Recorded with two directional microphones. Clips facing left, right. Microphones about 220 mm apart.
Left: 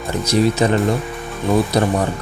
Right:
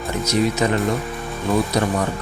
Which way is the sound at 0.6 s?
30° left (ahead or behind).